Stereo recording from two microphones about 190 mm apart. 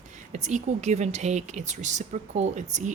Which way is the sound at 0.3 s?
40° right (ahead or behind).